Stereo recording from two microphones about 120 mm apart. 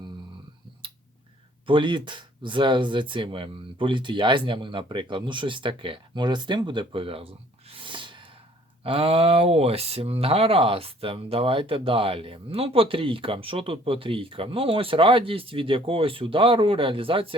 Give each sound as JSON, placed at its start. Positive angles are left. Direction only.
{"t": 1.6, "sound": "speech", "side_deg": -45}